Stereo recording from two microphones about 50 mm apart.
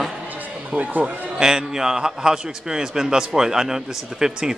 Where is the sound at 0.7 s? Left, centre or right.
Right.